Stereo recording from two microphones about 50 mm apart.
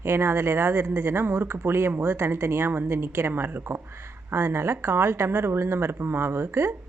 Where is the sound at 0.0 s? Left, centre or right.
Right.